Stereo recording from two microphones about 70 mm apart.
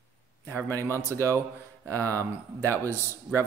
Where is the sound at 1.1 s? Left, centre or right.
Right.